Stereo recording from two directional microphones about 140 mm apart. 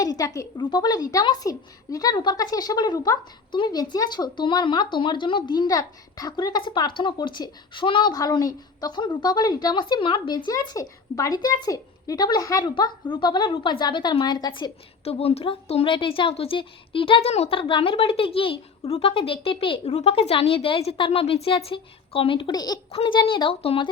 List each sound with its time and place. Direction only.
0.0 s speech: 25° left (ahead or behind)
15.0 s speech: 45° left (ahead or behind); by 22.8 s 30° left (ahead or behind)
22.9 s speech: 40° left (ahead or behind)